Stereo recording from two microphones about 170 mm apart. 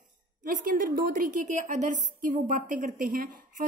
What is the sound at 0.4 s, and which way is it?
A woman's voice, 55° right (ahead or behind).